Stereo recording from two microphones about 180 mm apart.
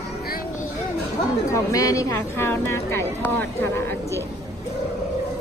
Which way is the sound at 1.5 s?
20° left (ahead or behind).